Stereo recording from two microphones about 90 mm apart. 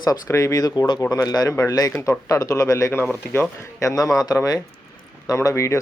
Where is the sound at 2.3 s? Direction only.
35° left (ahead or behind).